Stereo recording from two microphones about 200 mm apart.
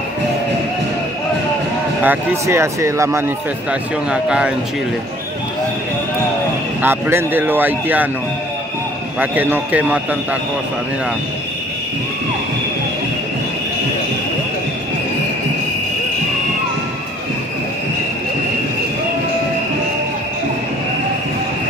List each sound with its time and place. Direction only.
2.0 s speech: 15° right (ahead or behind)
6.8 s speech: 10° right (ahead or behind)
9.2 s speech: 10° right (ahead or behind)